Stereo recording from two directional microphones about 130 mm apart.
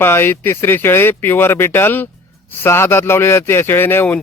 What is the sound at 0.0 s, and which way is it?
A man's voice, 15° left (ahead or behind).